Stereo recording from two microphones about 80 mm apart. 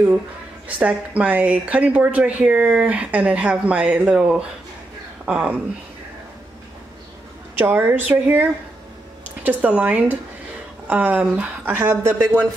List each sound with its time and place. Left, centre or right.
0.7 s speech: centre
7.5 s speech: right